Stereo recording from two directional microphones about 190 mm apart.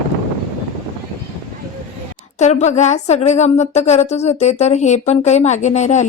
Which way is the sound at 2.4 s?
35° left (ahead or behind).